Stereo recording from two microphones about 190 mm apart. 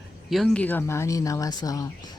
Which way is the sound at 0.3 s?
Centre (ahead or behind).